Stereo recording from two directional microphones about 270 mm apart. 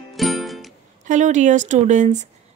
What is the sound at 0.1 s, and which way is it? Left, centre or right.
Music, centre.